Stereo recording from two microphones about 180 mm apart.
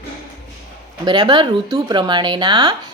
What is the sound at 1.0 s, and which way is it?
A woman's voice, 25° right (ahead or behind).